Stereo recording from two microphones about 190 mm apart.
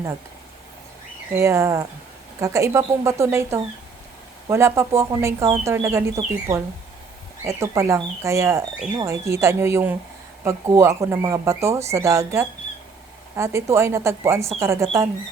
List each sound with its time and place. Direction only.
1.3 s speech: 15° right (ahead or behind)
7.4 s speech: 15° right (ahead or behind)